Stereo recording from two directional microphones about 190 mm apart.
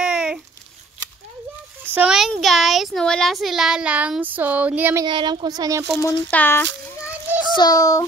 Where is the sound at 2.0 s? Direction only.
5° right (ahead or behind).